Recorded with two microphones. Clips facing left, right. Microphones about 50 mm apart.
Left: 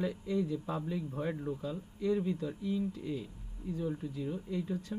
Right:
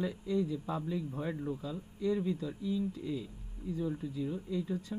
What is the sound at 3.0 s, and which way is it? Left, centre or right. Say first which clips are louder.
Speech: right 1 dB; left.